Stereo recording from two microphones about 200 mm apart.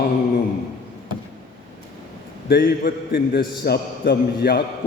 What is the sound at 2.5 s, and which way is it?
A man's voice, 45° left (ahead or behind).